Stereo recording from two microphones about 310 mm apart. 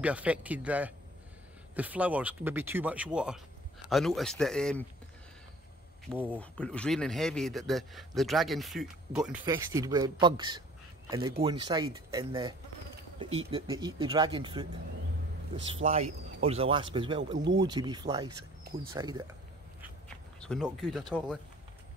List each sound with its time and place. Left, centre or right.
0.0 s speech: centre
6.0 s speech: centre
20.3 s speech: centre